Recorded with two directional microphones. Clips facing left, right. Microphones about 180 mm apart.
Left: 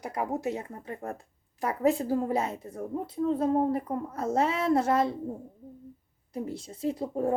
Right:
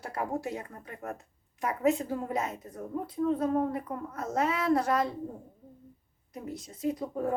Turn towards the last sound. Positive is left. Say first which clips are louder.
# left 2 dB
turn(degrees=30)  # may be behind; listen again after turning